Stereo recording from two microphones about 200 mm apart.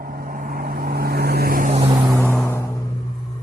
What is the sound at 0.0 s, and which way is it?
Vehicle, 45° right (ahead or behind).